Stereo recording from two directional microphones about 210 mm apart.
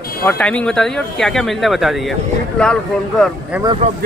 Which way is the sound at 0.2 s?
10° left (ahead or behind).